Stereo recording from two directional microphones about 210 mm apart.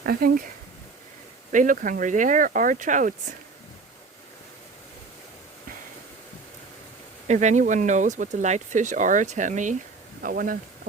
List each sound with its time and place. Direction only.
0.0 s speech: 45° right (ahead or behind)
1.5 s speech: 40° right (ahead or behind)
7.3 s speech: 35° right (ahead or behind)